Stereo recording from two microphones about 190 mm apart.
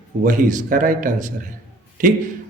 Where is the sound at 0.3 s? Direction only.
45° right (ahead or behind).